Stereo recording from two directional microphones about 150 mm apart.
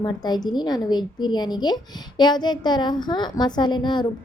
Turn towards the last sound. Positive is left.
turn(degrees=30)  # may be behind; listen again after turning